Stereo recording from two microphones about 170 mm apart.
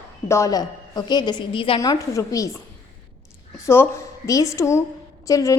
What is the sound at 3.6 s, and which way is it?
A woman's voice, 15° left (ahead or behind).